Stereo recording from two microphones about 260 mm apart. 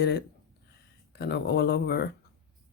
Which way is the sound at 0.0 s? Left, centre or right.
Left.